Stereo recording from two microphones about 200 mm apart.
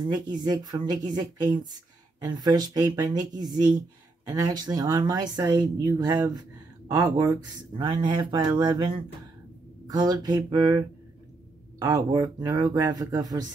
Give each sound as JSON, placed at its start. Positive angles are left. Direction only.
{"t": 0.0, "sound": "speech", "side_deg": -20}